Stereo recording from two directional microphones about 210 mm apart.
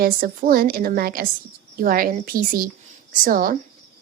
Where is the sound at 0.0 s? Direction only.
45° right (ahead or behind).